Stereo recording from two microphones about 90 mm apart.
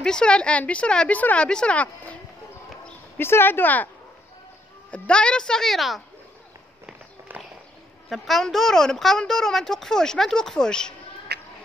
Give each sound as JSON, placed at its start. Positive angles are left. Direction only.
{"t": 0.0, "sound": "a woman's voice", "side_deg": 10}
{"t": 3.2, "sound": "speech", "side_deg": 25}
{"t": 4.9, "sound": "a woman's voice", "side_deg": 10}
{"t": 6.9, "sound": "run", "side_deg": -15}
{"t": 8.1, "sound": "a woman's voice", "side_deg": 0}